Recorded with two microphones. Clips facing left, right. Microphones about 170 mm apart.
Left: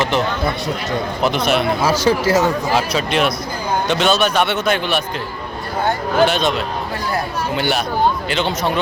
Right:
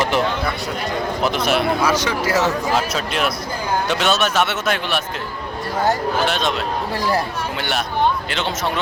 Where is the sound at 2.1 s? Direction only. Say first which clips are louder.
Left 5 dB; 30° left (ahead or behind).